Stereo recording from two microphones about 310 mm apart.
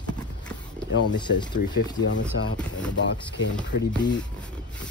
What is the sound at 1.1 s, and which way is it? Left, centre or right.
Speech, centre.